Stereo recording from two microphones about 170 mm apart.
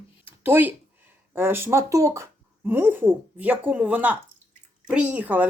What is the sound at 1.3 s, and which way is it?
Speech, 15° right (ahead or behind).